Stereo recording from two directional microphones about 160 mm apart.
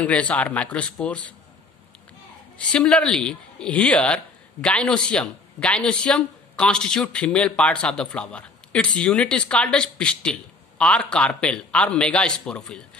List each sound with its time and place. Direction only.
0.0 s speech: 10° left (ahead or behind)
2.7 s speech: 5° left (ahead or behind)